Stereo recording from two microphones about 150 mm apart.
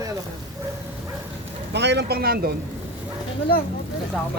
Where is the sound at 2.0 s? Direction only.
85° right.